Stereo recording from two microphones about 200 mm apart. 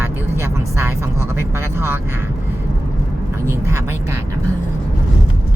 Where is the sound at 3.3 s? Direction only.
15° right (ahead or behind).